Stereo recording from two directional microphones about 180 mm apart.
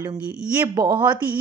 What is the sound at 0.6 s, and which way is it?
Speech, 25° right (ahead or behind).